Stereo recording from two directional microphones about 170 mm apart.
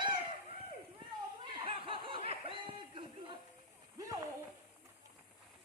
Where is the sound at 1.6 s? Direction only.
30° right (ahead or behind).